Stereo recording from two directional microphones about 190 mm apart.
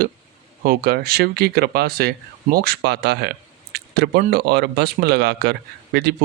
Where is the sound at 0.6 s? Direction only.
55° right (ahead or behind).